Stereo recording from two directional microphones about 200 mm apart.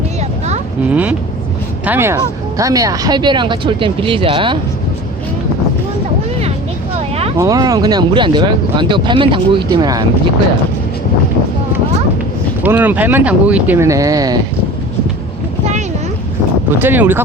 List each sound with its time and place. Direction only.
0.9 s speech: 5° right (ahead or behind); by 4.5 s 25° right (ahead or behind)
7.3 s speech: 15° right (ahead or behind)
12.6 s speech: 10° right (ahead or behind)
16.8 s speech: 10° right (ahead or behind)